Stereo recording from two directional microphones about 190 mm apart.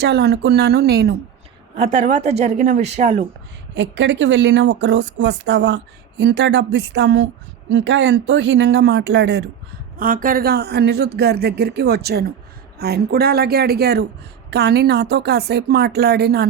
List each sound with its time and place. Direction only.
0.0 s speech: 60° right (ahead or behind)
1.7 s speech: 35° right (ahead or behind)
3.8 s a woman's voice: 70° right (ahead or behind)
10.0 s speech: 45° right (ahead or behind)